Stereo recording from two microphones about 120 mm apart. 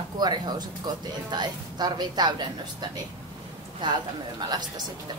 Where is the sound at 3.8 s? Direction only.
35° right (ahead or behind).